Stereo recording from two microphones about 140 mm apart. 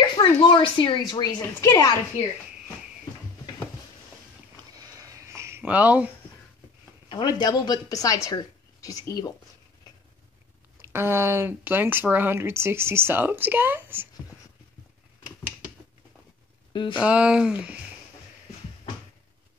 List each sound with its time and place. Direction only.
0.2 s speech: 35° left (ahead or behind)
1.2 s a woman's voice: 25° left (ahead or behind)
4.8 s a sound: 25° right (ahead or behind); by 6.1 s 10° right (ahead or behind)
7.1 s a woman's voice: 35° left (ahead or behind)
10.8 s speech: 15° right (ahead or behind)
16.7 s speech: 35° left (ahead or behind)
17.0 s speech: 10° right (ahead or behind)